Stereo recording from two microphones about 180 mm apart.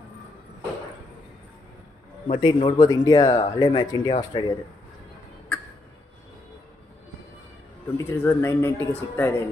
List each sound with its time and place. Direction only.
2.2 s speech: 30° left (ahead or behind)
8.0 s speech: 15° left (ahead or behind)